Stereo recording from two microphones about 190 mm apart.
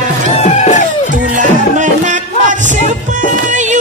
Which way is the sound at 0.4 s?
40° left (ahead or behind).